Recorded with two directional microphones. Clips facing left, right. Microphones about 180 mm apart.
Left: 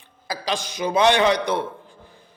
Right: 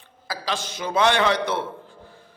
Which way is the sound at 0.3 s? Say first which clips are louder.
Left 2 dB; 15° left (ahead or behind).